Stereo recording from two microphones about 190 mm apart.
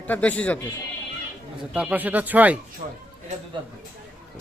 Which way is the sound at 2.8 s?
35° right (ahead or behind).